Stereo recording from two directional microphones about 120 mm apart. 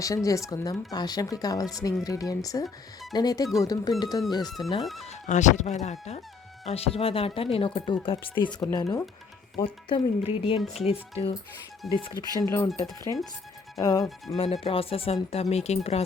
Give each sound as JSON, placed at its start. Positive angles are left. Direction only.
{"t": 0.0, "sound": "speech", "side_deg": 25}
{"t": 4.8, "sound": "speech", "side_deg": 0}
{"t": 5.0, "sound": "speech", "side_deg": 90}
{"t": 6.7, "sound": "speech", "side_deg": 55}
{"t": 8.4, "sound": "speech", "side_deg": 30}
{"t": 9.6, "sound": "speech", "side_deg": 45}
{"t": 10.8, "sound": "speech", "side_deg": 60}
{"t": 11.9, "sound": "speech", "side_deg": 40}
{"t": 14.3, "sound": "speech", "side_deg": 55}